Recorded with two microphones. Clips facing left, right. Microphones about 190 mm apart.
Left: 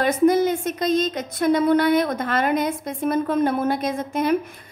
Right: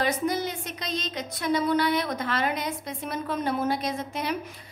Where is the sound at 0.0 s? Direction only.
50° left (ahead or behind).